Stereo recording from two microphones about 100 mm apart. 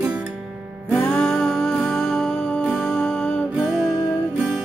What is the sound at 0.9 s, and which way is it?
Music, 10° left (ahead or behind).